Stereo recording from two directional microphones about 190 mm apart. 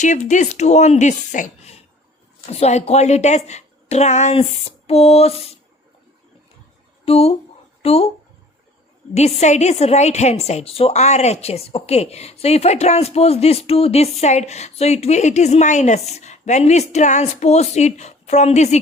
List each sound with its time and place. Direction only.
0.0 s a woman's voice: 40° left (ahead or behind)
7.0 s speech: 30° left (ahead or behind)
9.1 s a woman's voice: 35° left (ahead or behind)